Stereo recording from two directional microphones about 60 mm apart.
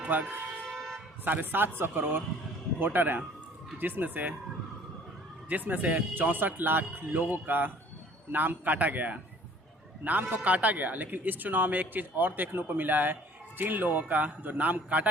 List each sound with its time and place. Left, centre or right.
0.1 s a man's voice: right
0.7 s toot: centre
1.2 s speech: right
5.5 s a man's voice: right